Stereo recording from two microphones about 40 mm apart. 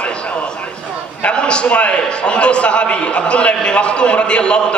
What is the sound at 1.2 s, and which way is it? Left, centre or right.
A man's voice, left.